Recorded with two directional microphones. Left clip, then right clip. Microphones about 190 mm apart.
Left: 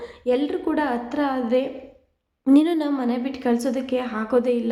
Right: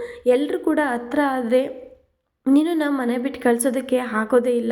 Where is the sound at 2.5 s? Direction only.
Centre (ahead or behind).